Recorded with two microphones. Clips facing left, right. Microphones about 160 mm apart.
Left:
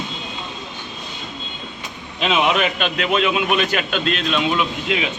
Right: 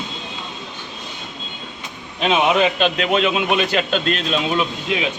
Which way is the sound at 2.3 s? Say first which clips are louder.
Right 2 dB; 20° right (ahead or behind).